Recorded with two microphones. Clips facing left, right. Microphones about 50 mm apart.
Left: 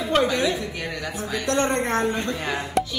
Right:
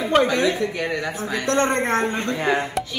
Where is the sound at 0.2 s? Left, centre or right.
Right.